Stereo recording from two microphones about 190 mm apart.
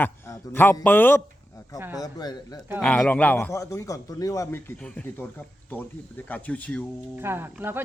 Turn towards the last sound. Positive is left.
turn(degrees=-10)  # may be behind; listen again after turning